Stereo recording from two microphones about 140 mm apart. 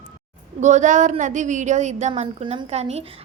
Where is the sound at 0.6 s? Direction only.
60° right (ahead or behind).